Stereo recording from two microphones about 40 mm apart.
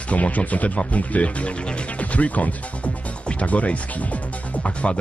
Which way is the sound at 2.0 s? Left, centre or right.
Left.